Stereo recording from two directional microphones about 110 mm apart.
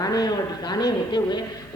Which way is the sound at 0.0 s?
35° left (ahead or behind).